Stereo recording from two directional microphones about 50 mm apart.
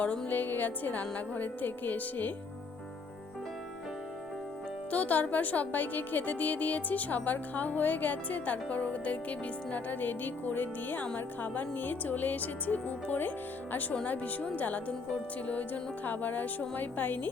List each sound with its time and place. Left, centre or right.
0.3 s speech: left
4.9 s speech: left
13.9 s speech: left